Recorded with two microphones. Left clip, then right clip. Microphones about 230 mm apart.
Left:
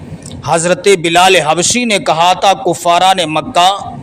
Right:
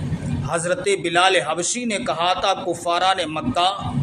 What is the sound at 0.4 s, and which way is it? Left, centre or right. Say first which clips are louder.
A man's voice: left 12 dB; left.